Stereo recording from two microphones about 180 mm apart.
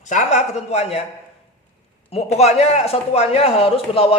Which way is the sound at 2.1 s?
35° left (ahead or behind).